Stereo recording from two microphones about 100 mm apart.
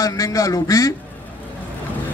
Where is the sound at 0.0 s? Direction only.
35° left (ahead or behind).